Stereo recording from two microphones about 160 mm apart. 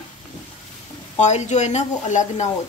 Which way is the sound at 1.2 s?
45° left (ahead or behind).